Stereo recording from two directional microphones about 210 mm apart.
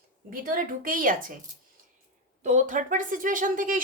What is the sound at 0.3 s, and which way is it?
Speech, 40° right (ahead or behind).